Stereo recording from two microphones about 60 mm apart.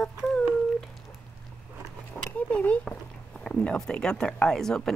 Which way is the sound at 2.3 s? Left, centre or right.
Left.